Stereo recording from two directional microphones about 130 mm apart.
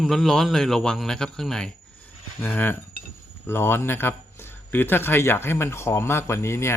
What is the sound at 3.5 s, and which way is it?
Speech, 20° left (ahead or behind).